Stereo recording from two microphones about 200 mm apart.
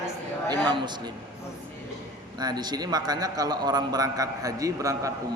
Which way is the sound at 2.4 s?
20° right (ahead or behind).